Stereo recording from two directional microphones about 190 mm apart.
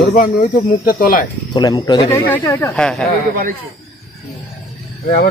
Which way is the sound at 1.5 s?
20° left (ahead or behind).